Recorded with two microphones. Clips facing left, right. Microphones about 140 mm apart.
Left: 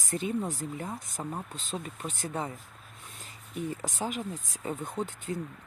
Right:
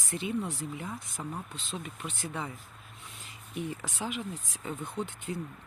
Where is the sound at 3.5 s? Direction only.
40° left (ahead or behind).